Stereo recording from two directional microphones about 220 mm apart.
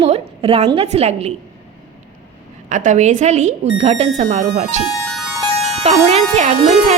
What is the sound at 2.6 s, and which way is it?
Speech, 35° right (ahead or behind).